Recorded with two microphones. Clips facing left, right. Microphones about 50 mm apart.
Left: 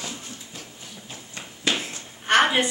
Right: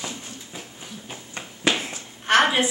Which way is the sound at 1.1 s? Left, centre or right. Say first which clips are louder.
Right 2 dB; right.